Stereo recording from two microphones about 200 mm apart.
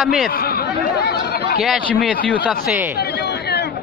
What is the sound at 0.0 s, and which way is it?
Speech, centre (ahead or behind).